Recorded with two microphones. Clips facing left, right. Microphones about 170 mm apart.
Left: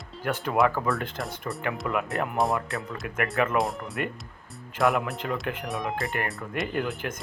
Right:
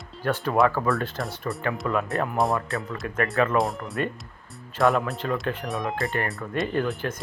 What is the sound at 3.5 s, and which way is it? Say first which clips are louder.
Speech: right 2 dB; centre (ahead or behind).